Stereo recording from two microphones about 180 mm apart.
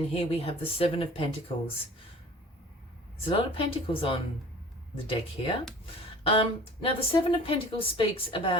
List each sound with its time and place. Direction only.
0.1 s a woman's voice: 30° left (ahead or behind)
3.2 s a woman's voice: 30° left (ahead or behind)